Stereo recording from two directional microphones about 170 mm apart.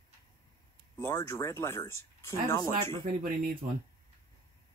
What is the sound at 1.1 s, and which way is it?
Speech, 20° left (ahead or behind).